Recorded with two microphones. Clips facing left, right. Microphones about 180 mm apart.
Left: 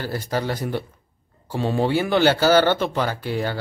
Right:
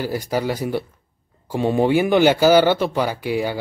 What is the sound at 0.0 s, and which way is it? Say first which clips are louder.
Speech: right 3 dB; 10° right (ahead or behind).